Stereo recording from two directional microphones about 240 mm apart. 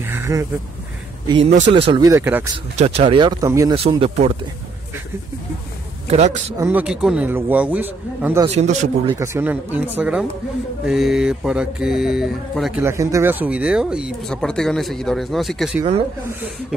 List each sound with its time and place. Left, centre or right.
0.0 s a sound: centre
1.2 s speech: centre
2.5 s speech: right
6.0 s speech: right
6.6 s a man's voice: centre
8.5 s speech: right
9.2 s a man's voice: centre